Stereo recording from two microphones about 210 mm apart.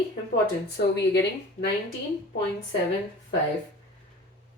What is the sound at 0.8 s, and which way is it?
Speech, 50° left (ahead or behind).